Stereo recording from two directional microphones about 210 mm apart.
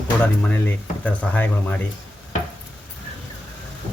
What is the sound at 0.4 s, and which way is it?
Speech, 5° left (ahead or behind).